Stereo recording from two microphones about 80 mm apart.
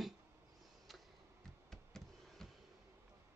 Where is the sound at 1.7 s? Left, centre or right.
Centre.